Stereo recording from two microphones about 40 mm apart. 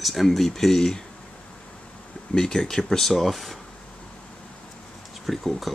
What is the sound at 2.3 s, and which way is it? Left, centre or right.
Speech, centre.